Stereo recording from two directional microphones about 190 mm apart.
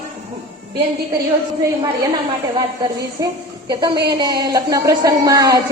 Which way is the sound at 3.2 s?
20° right (ahead or behind).